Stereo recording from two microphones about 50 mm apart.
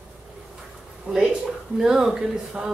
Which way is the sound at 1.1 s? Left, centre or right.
Centre.